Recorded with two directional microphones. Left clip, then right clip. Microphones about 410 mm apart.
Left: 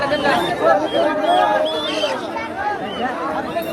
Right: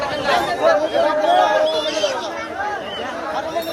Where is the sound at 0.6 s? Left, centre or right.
Right.